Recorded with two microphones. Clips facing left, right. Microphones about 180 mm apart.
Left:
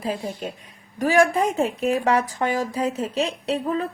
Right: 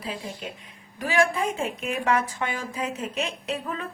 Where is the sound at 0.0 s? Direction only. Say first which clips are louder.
Left 6 dB; 45° left (ahead or behind).